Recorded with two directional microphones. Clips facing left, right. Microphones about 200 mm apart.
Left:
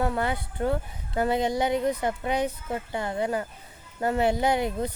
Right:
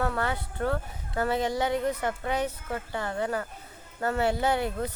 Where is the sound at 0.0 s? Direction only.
15° left (ahead or behind).